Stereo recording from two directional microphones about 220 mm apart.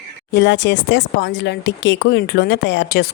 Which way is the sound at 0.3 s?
50° left (ahead or behind).